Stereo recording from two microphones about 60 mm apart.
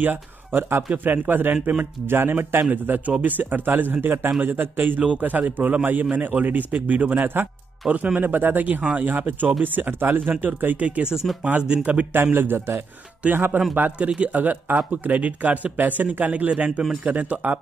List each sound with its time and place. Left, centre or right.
0.0 s a man's voice: right
11.2 s speech: centre
11.6 s a man's voice: centre